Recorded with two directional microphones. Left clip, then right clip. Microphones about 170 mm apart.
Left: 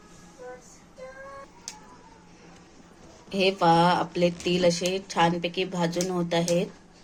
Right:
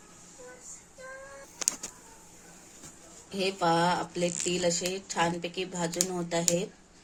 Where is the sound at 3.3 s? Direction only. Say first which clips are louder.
Left 6 dB; 5° right (ahead or behind).